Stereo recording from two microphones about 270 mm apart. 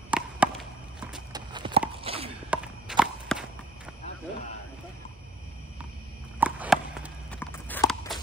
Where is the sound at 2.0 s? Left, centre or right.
Right.